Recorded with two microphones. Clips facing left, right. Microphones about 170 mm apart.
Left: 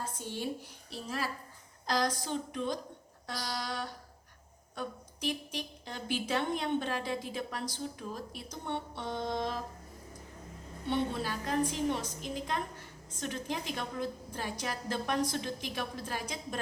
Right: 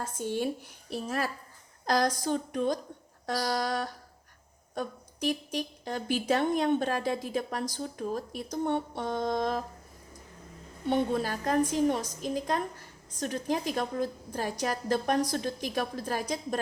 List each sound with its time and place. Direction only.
0.0 s speech: 50° right (ahead or behind)
10.8 s a woman's voice: 45° right (ahead or behind)